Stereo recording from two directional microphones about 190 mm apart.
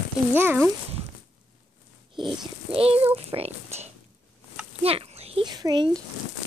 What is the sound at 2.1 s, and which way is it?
A child's voice, 25° right (ahead or behind).